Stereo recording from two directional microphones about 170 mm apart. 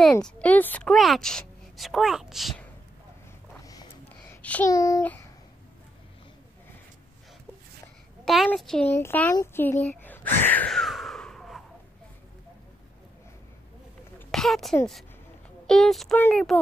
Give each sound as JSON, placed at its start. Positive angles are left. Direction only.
{"t": 0.0, "sound": "a woman's voice", "side_deg": 5}
{"t": 4.3, "sound": "a sound", "side_deg": 10}
{"t": 4.6, "sound": "a child's voice", "side_deg": 20}
{"t": 8.5, "sound": "a woman's voice", "side_deg": 5}
{"t": 10.0, "sound": "a sound", "side_deg": 10}
{"t": 14.3, "sound": "a child's voice", "side_deg": 0}